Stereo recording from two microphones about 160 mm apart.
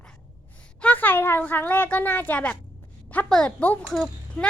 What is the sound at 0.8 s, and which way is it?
A woman's voice, 10° left (ahead or behind).